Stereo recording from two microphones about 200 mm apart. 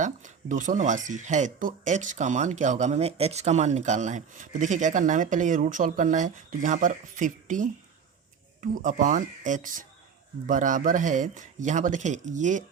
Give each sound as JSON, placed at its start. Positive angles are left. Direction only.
{"t": 0.0, "sound": "speech", "side_deg": -40}
{"t": 8.8, "sound": "speech", "side_deg": -40}